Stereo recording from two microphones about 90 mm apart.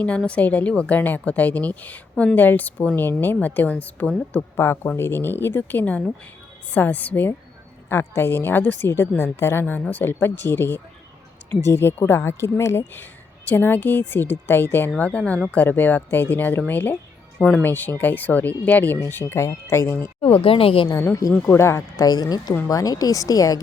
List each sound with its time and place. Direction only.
0.0 s a woman's voice: 15° left (ahead or behind)
18.9 s speech: 30° left (ahead or behind)
20.2 s a woman's voice: 90° left
21.1 s speech: 35° left (ahead or behind)
22.0 s speech: 45° left (ahead or behind)